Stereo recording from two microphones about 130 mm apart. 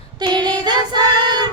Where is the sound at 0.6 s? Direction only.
35° right (ahead or behind).